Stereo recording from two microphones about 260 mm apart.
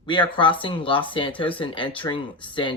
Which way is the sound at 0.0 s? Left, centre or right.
Centre.